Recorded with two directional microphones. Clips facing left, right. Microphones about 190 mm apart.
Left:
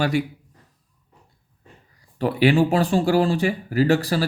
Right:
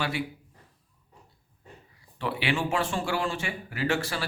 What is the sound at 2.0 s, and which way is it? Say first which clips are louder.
Speech: left 12 dB; 40° left (ahead or behind).